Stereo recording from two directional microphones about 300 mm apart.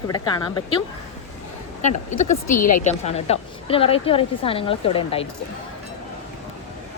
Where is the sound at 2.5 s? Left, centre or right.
Left.